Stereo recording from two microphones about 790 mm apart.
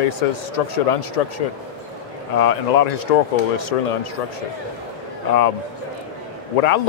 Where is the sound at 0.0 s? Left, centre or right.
Left.